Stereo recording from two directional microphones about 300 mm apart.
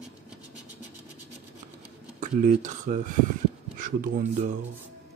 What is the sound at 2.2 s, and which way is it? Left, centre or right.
Speech, right.